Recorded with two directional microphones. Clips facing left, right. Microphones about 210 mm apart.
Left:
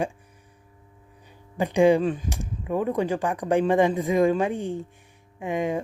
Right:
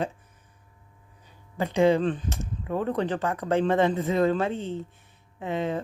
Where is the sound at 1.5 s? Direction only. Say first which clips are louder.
Left 3 dB; 15° left (ahead or behind).